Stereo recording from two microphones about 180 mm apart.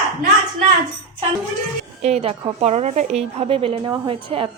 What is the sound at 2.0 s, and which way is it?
A woman's voice, 35° right (ahead or behind).